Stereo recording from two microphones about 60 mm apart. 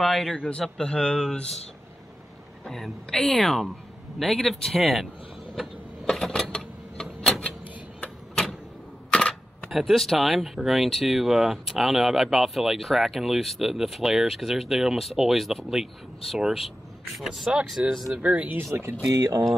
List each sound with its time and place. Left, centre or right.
0.0 s speech: centre
2.6 s speech: centre
6.0 s a sound: centre
9.3 s speech: centre
17.8 s speech: right
19.0 s speech: right